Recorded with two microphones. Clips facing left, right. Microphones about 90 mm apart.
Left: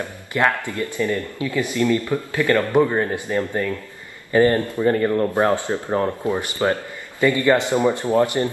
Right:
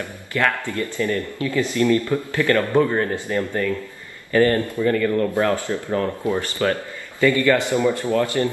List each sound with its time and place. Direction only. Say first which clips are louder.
0.0 s speech: left 2 dB; 20° left (ahead or behind)
4.9 s speech: left 1 dB; 30° left (ahead or behind)